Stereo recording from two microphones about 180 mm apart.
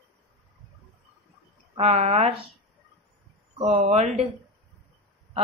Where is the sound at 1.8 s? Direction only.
35° right (ahead or behind).